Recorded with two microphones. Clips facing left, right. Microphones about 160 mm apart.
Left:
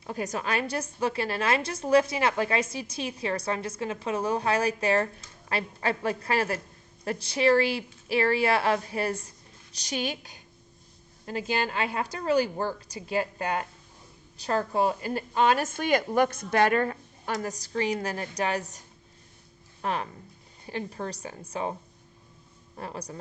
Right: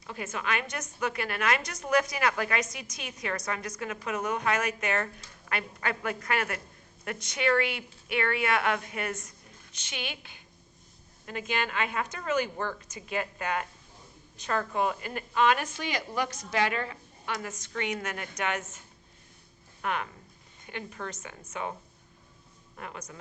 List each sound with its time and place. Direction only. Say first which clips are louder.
0.0 s a woman's voice: left 4 dB; 40° left (ahead or behind)